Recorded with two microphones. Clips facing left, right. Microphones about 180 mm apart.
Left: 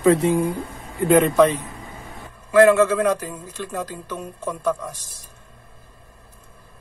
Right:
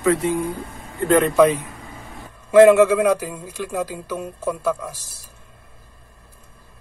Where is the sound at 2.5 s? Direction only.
20° right (ahead or behind).